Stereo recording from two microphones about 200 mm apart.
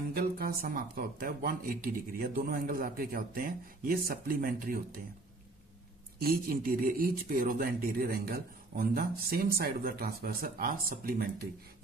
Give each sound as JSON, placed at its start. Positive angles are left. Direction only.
{"t": 0.1, "sound": "speech", "side_deg": -50}
{"t": 6.1, "sound": "speech", "side_deg": -45}